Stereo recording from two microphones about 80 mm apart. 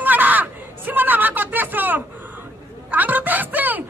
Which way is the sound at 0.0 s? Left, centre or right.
Right.